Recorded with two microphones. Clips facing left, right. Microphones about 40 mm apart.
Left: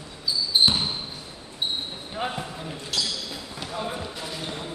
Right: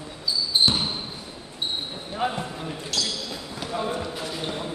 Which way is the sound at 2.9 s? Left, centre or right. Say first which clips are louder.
Even; centre.